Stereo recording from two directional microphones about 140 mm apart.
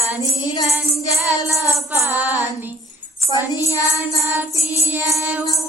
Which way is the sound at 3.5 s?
25° left (ahead or behind).